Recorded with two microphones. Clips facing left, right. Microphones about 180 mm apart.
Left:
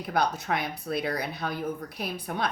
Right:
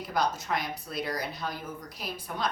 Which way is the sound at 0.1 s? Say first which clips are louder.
Left 2 dB; 60° left (ahead or behind).